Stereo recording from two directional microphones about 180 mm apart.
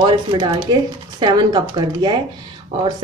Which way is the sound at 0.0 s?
25° right (ahead or behind).